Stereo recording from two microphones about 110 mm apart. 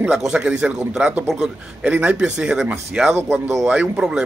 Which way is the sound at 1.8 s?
15° right (ahead or behind).